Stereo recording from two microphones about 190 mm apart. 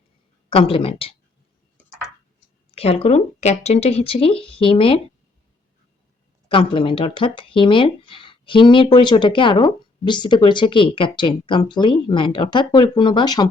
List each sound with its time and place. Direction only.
0.5 s speech: 30° left (ahead or behind)
2.7 s speech: 30° left (ahead or behind)
6.5 s speech: 30° left (ahead or behind)